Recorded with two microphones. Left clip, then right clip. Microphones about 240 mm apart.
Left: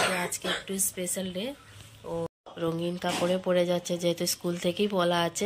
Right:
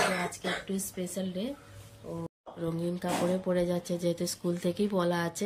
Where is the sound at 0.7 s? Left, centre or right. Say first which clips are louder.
Left 3 dB; centre.